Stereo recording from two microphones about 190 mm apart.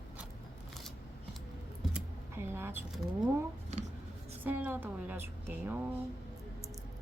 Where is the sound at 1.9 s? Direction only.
10° right (ahead or behind).